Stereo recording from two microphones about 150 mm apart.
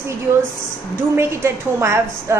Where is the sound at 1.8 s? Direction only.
20° right (ahead or behind).